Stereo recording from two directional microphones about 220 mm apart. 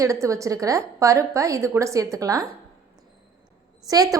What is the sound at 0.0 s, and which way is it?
A woman's voice, 15° right (ahead or behind).